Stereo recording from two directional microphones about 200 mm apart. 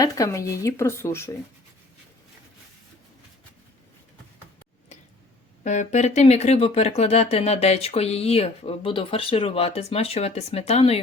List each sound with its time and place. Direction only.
0.0 s speech: 15° left (ahead or behind)
5.6 s speech: 35° left (ahead or behind)